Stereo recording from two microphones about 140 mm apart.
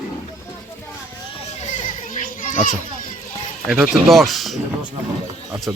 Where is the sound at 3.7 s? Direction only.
15° right (ahead or behind).